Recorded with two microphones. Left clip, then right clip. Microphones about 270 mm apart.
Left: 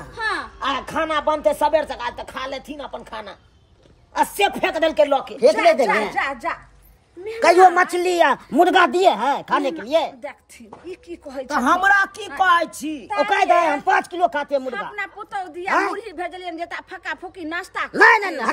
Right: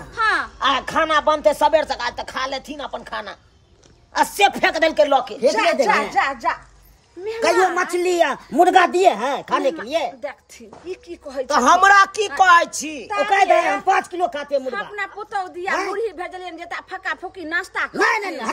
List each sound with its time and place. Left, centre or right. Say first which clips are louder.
0.1 s speech: right 6 dB; centre
7.7 s speech: left 2 dB; centre
11.4 s speech: right 4 dB; right
13.8 s speech: even; centre